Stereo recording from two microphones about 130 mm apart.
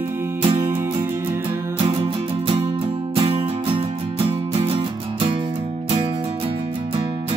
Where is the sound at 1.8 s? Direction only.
40° right (ahead or behind).